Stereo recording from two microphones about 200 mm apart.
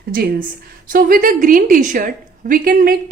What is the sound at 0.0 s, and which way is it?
A woman's voice, 50° right (ahead or behind).